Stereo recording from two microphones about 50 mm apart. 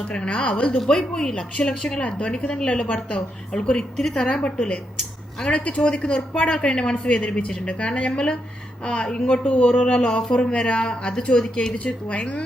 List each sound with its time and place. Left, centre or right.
0.1 s a woman's voice: left
0.9 s a woman's voice: centre